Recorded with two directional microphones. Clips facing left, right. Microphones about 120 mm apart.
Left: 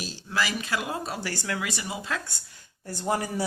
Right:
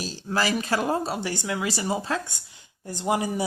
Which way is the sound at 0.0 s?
40° right (ahead or behind).